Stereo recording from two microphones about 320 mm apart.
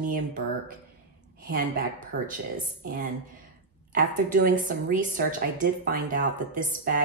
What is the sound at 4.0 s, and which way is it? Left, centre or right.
A woman's voice, right.